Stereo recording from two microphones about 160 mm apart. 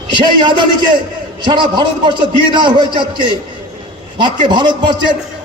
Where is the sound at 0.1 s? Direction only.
30° right (ahead or behind).